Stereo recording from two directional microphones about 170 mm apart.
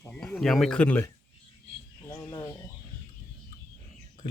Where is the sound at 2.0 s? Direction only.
15° left (ahead or behind).